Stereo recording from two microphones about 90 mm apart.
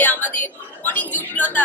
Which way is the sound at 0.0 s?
20° left (ahead or behind).